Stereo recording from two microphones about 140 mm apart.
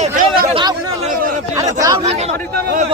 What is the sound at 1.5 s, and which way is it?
Speech, 25° right (ahead or behind).